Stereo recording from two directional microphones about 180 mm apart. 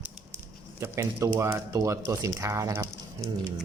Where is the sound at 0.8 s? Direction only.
15° right (ahead or behind).